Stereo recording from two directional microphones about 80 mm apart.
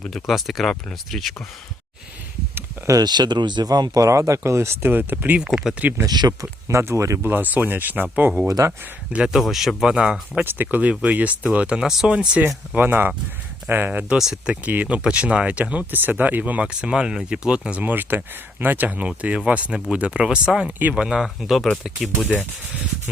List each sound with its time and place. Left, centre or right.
0.0 s speech: centre
2.8 s speech: right
5.4 s speech: centre
6.1 s speech: right
6.7 s speech: right
7.2 s speech: right
8.4 s speech: right
9.2 s speech: centre
10.4 s speech: right
14.1 s speech: centre